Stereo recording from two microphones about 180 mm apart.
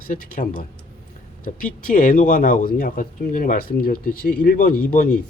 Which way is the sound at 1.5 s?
50° left (ahead or behind).